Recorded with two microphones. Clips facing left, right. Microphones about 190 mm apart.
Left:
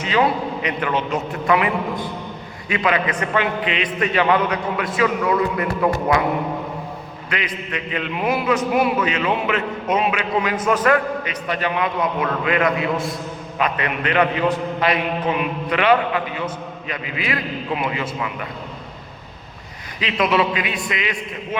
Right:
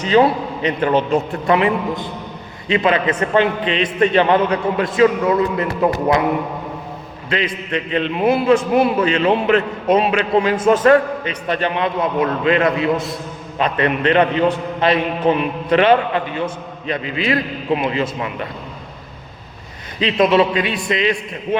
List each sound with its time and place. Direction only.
0.0 s a man's voice: 35° right (ahead or behind)
7.3 s a man's voice: 30° right (ahead or behind)
20.0 s a man's voice: 25° right (ahead or behind)